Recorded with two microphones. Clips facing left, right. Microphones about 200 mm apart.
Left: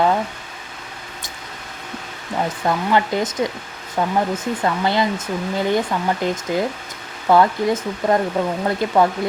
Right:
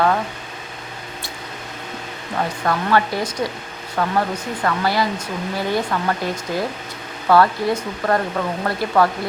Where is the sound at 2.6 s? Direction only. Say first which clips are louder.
Even; 15° left (ahead or behind).